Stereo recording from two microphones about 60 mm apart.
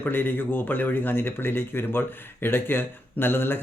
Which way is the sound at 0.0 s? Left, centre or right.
Left.